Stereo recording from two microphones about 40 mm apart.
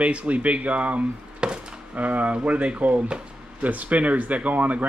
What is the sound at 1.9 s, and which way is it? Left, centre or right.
Speech, right.